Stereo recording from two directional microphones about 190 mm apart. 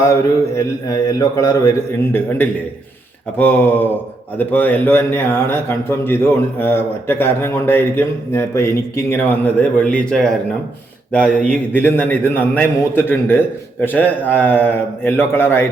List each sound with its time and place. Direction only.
0.0 s a man's voice: 15° left (ahead or behind)
3.3 s a man's voice: 10° left (ahead or behind)